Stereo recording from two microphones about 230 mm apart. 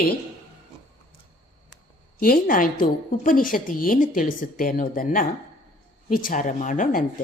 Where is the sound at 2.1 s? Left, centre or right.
Left.